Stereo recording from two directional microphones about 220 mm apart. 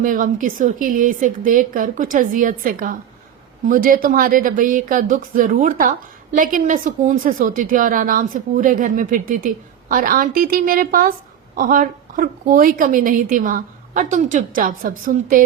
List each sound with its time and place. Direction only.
0.0 s a woman's voice: 35° right (ahead or behind)